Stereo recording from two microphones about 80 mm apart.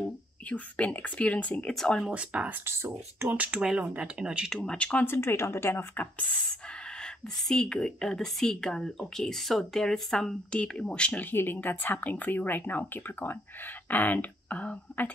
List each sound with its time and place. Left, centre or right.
0.5 s a woman's voice: centre
2.0 s speech: centre
2.6 s speech: right
3.6 s speech: centre
4.6 s a woman's voice: centre
5.0 s a woman's voice: left